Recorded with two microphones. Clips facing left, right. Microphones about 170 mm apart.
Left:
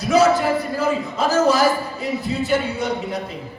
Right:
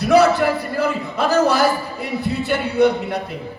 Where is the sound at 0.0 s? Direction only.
60° right (ahead or behind).